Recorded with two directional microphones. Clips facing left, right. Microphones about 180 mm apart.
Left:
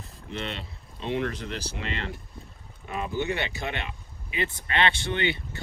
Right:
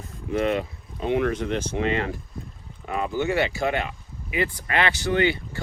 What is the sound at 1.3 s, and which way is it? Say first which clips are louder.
Speech: right 9 dB; 35° left (ahead or behind).